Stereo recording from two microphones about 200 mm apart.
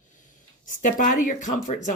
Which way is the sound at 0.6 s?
40° left (ahead or behind).